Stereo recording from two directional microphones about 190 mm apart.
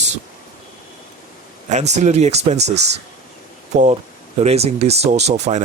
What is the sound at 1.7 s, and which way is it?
Speech, 35° right (ahead or behind).